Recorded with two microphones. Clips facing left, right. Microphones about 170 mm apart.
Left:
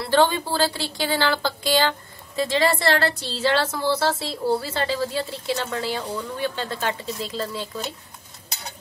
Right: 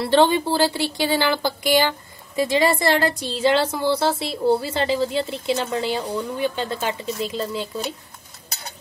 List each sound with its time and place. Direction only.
0.0 s speech: 20° right (ahead or behind)